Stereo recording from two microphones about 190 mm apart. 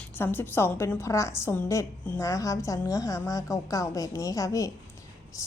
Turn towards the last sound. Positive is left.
turn(degrees=15)  # may be behind; listen again after turning